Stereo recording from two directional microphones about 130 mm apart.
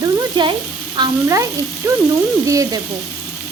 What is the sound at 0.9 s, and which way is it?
Stir, 30° right (ahead or behind).